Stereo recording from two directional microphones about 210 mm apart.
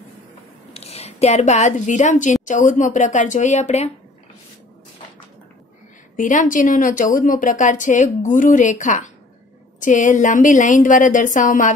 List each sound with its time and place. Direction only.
0.7 s a woman's voice: 30° left (ahead or behind)
6.1 s a woman's voice: 40° left (ahead or behind)